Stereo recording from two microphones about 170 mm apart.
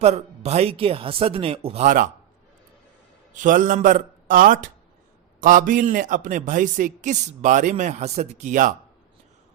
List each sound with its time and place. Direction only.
0.0 s speech: 40° right (ahead or behind)
3.3 s a man's voice: 50° right (ahead or behind)